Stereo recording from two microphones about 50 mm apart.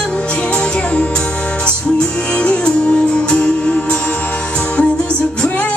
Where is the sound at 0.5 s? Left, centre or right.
Left.